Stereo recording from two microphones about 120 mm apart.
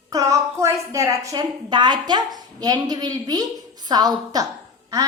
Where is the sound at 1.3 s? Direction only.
35° right (ahead or behind).